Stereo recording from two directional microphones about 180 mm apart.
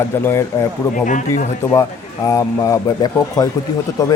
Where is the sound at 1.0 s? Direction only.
45° left (ahead or behind).